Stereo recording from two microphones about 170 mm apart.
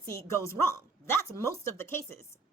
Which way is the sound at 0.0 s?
15° left (ahead or behind).